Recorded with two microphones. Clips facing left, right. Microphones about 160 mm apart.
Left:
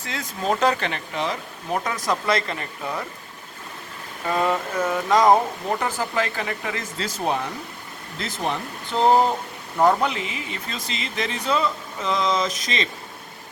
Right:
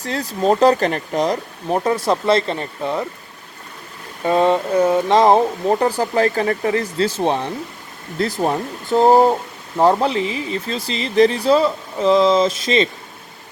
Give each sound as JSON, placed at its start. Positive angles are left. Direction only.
{"t": 0.0, "sound": "speech", "side_deg": -35}
{"t": 4.3, "sound": "speech", "side_deg": -25}
{"t": 8.4, "sound": "speech", "side_deg": -40}
{"t": 9.7, "sound": "speech", "side_deg": -30}